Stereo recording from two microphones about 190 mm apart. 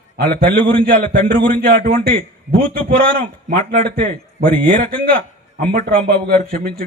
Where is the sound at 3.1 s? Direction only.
50° right (ahead or behind).